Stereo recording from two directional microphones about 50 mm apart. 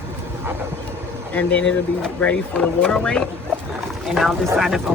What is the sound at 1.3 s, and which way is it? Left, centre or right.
Speech, left.